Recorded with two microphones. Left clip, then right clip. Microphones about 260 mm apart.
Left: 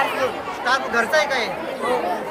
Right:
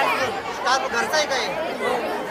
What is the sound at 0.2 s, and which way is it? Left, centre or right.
Chatter, centre.